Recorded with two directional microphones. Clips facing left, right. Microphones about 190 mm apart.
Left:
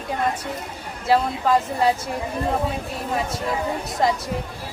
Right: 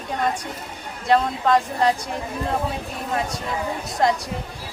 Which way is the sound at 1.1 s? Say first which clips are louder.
Right 1 dB; 5° left (ahead or behind).